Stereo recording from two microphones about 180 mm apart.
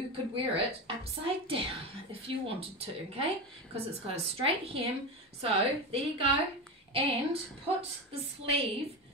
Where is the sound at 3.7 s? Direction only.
35° right (ahead or behind).